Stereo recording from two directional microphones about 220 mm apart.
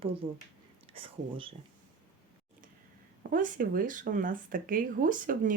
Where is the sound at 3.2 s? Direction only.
40° right (ahead or behind).